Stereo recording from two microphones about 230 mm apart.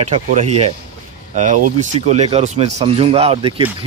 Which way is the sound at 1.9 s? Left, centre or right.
Right.